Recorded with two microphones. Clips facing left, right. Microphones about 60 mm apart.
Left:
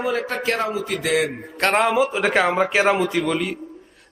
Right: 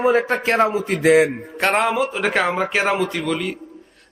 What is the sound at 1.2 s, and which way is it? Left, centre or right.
Speech, centre.